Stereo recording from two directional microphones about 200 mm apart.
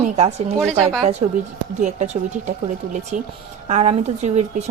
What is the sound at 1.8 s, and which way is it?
Speech, 35° right (ahead or behind).